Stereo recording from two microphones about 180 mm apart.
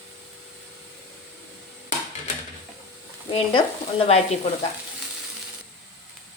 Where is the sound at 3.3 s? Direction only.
30° left (ahead or behind).